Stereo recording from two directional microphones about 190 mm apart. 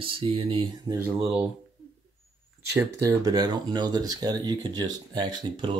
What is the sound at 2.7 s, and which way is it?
Speech, 15° right (ahead or behind).